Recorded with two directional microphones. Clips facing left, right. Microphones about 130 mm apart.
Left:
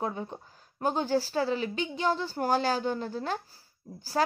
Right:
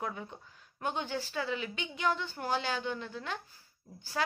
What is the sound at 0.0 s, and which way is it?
A woman's voice, 30° left (ahead or behind).